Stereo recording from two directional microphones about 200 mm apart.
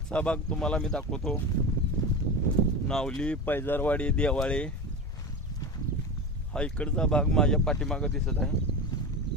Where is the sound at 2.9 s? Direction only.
5° left (ahead or behind).